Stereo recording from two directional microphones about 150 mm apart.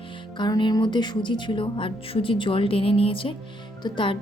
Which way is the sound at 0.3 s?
30° left (ahead or behind).